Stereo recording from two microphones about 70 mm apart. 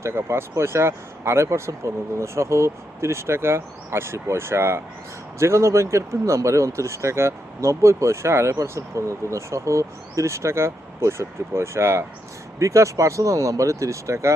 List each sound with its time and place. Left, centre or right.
0.0 s speech: right